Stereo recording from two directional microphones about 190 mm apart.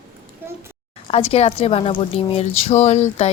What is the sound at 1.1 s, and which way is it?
A woman's voice, 30° left (ahead or behind).